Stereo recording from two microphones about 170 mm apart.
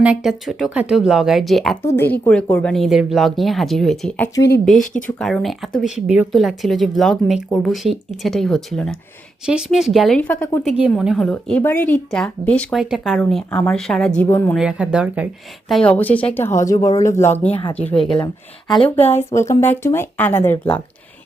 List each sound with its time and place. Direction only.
0.0 s a woman's voice: 5° right (ahead or behind)
1.8 s a woman's voice: 15° left (ahead or behind)
4.7 s speech: 50° left (ahead or behind)
5.0 s a woman's voice: centre (ahead or behind)
10.6 s a woman's voice: 5° right (ahead or behind)
13.1 s a woman's voice: 10° left (ahead or behind)
14.2 s speech: 15° left (ahead or behind)
14.5 s speech: 5° right (ahead or behind)
15.7 s speech: 5° left (ahead or behind)
17.5 s speech: 30° left (ahead or behind)
19.1 s speech: 15° left (ahead or behind)